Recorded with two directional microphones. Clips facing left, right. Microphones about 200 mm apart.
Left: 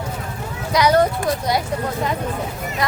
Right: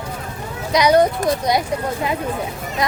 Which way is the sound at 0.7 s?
15° right (ahead or behind).